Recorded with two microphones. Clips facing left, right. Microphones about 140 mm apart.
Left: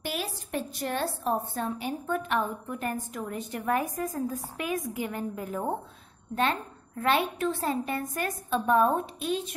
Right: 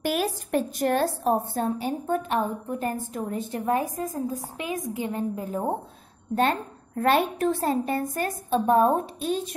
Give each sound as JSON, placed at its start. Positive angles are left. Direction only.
{"t": 0.0, "sound": "a woman's voice", "side_deg": -50}
{"t": 6.3, "sound": "a woman's voice", "side_deg": -40}